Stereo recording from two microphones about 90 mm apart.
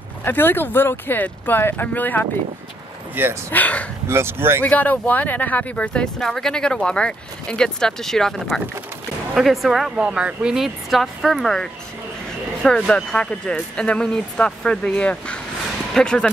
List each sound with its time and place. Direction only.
0.2 s speech: 25° left (ahead or behind)
3.2 s speech: 25° right (ahead or behind)
3.5 s speech: 15° left (ahead or behind)
4.1 s speech: 25° right (ahead or behind)
4.6 s speech: 20° left (ahead or behind)
6.1 s speech: 5° left (ahead or behind)